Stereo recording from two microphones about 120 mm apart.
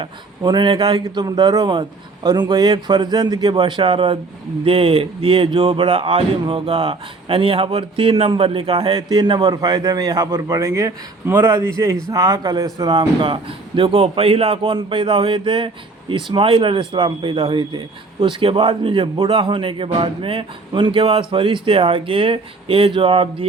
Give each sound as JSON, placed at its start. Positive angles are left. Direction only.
{"t": 0.0, "sound": "a man's voice", "side_deg": -40}
{"t": 1.2, "sound": "a man's voice", "side_deg": -30}